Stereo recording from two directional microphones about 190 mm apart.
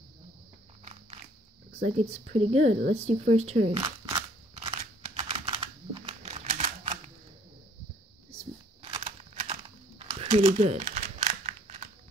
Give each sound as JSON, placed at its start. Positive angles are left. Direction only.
{"t": 1.7, "sound": "speech", "side_deg": -35}
{"t": 4.6, "sound": "a sound", "side_deg": -25}
{"t": 8.9, "sound": "crumpling", "side_deg": -30}